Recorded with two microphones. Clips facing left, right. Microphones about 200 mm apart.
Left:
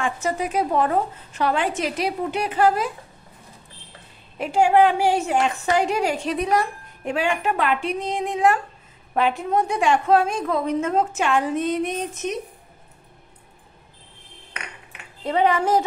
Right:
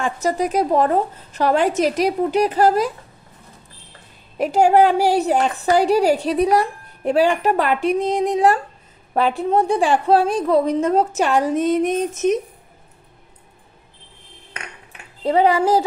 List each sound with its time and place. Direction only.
0.0 s a woman's voice: 40° right (ahead or behind)
4.4 s a woman's voice: 40° right (ahead or behind)
15.2 s a woman's voice: 35° right (ahead or behind)